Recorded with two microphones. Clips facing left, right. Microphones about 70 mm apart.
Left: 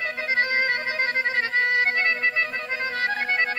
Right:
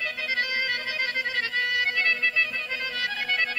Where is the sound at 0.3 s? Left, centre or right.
Left.